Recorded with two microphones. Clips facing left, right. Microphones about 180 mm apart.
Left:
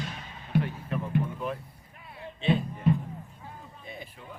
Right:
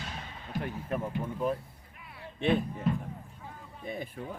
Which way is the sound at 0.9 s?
45° right (ahead or behind).